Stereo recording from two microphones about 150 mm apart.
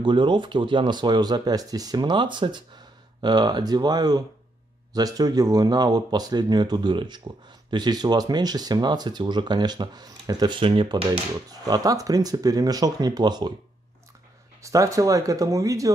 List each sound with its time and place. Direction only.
0.0 s speech: 30° right (ahead or behind)
14.6 s speech: 20° right (ahead or behind)